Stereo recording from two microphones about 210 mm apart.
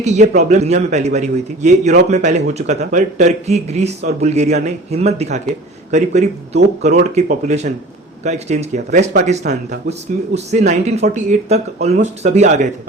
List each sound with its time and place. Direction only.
0.0 s a man's voice: 35° right (ahead or behind)